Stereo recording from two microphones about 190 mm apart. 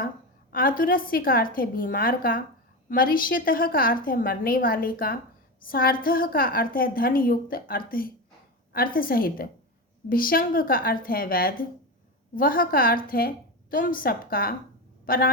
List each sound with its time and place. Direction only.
0.5 s a woman's voice: 50° left (ahead or behind)